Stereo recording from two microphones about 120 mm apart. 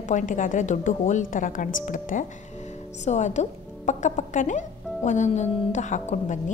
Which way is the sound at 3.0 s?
80° left.